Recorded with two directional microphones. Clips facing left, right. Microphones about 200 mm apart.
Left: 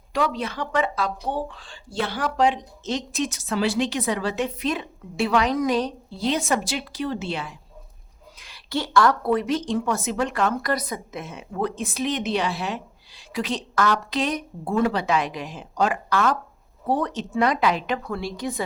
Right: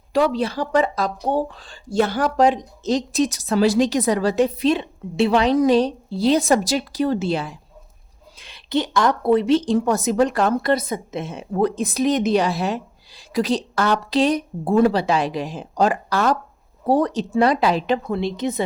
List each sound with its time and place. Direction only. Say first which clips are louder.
0.1 s speech: right 6 dB; 30° right (ahead or behind)
8.4 s speech: right 6 dB; 25° right (ahead or behind)